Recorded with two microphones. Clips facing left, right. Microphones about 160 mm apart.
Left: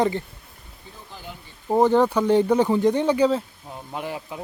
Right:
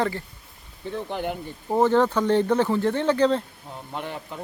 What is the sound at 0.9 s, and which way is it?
Speech, 70° right (ahead or behind).